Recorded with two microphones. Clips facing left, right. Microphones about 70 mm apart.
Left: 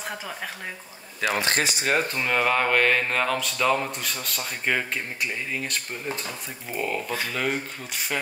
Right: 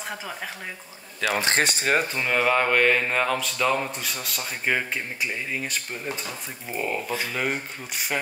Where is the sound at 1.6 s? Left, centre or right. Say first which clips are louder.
Right 2 dB; right.